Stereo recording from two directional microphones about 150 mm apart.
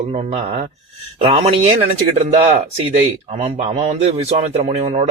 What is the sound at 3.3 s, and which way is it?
A man's voice, 50° right (ahead or behind).